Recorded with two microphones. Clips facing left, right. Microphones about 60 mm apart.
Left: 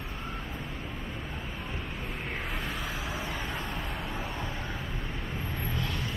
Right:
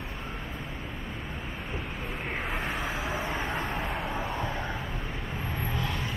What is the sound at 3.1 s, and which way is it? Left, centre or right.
Vehicle, right.